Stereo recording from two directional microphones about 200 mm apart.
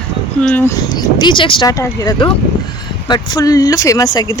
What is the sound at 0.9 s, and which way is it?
Speech, 25° left (ahead or behind).